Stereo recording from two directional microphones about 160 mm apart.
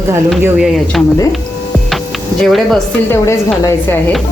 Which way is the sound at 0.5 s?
5° right (ahead or behind).